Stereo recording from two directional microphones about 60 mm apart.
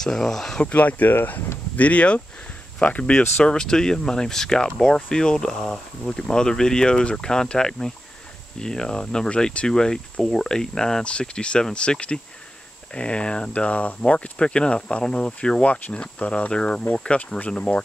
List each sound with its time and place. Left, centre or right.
0.0 s speech: centre
0.6 s speech: left
3.4 s speech: centre